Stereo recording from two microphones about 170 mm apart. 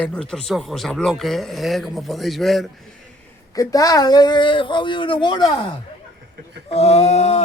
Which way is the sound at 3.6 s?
20° left (ahead or behind).